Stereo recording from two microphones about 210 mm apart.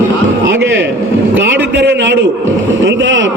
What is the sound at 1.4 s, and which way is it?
A man's voice, 55° right (ahead or behind).